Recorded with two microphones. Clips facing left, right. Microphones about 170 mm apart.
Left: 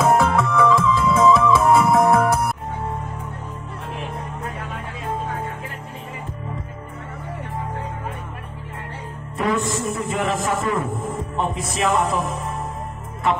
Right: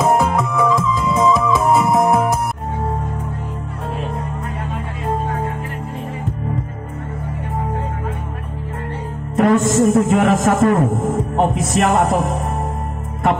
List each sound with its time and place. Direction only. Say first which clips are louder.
0.0 s music: right 1 dB; 15° right (ahead or behind)
9.4 s a man's voice: right 9 dB; 45° right (ahead or behind)